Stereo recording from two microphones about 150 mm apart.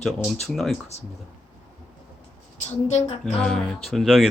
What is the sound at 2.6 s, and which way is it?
Speech, 45° left (ahead or behind).